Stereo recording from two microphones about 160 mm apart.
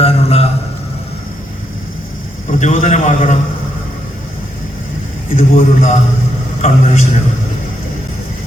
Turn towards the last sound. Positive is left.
turn(degrees=45)  # may be behind; listen again after turning